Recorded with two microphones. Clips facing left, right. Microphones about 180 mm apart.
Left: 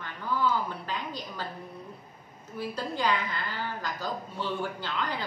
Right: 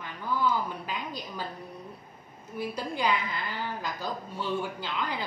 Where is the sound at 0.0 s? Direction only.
15° right (ahead or behind).